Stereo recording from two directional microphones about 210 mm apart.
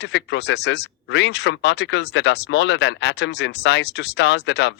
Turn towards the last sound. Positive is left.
turn(degrees=55)  # may be behind; listen again after turning